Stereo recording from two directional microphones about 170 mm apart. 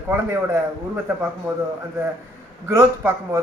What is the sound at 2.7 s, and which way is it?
Speech, 20° right (ahead or behind).